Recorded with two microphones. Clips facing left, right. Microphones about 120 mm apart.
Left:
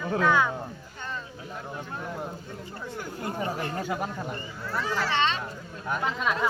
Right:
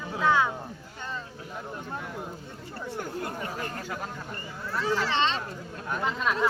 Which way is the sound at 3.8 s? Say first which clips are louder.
Left 5 dB; 15° left (ahead or behind).